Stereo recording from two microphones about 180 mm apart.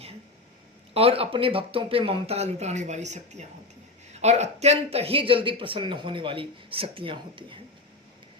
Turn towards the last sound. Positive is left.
turn(degrees=-30)  # may be behind; listen again after turning